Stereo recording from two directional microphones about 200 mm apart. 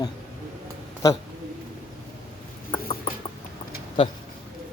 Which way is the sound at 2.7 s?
20° left (ahead or behind).